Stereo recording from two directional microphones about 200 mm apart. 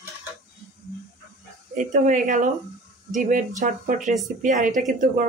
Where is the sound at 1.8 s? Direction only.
40° right (ahead or behind).